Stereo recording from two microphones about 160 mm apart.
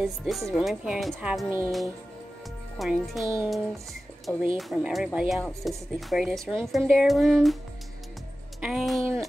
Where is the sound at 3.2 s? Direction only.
15° right (ahead or behind).